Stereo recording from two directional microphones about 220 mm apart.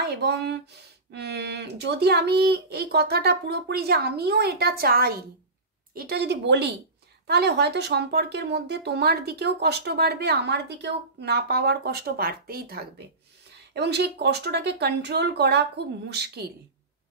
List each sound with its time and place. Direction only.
0.0 s speech: 50° right (ahead or behind)